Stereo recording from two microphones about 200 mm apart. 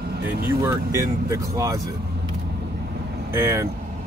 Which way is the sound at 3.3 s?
15° right (ahead or behind).